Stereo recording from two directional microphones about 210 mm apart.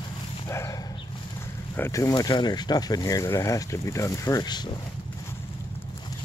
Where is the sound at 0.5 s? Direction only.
15° left (ahead or behind).